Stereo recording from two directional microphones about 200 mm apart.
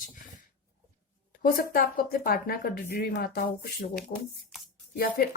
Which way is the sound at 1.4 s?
45° left (ahead or behind).